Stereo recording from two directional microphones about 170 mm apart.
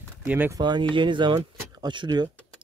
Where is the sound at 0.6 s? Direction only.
25° right (ahead or behind).